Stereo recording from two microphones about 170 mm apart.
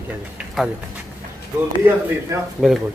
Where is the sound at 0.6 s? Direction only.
Centre (ahead or behind).